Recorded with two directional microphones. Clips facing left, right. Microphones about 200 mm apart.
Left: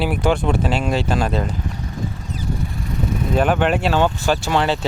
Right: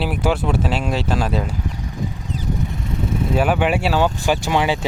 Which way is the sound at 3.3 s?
10° right (ahead or behind).